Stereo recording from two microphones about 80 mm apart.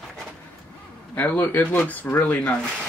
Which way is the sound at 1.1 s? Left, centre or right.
Left.